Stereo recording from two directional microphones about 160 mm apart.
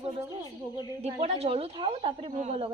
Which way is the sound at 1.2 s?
40° right (ahead or behind).